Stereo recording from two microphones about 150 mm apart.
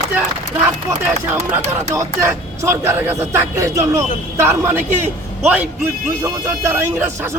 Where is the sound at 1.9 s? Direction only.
20° right (ahead or behind).